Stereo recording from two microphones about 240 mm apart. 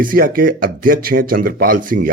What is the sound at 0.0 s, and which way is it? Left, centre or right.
Speech, right.